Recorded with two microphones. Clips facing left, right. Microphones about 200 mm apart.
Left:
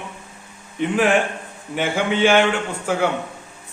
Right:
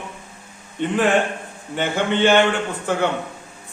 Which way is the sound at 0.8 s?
10° left (ahead or behind).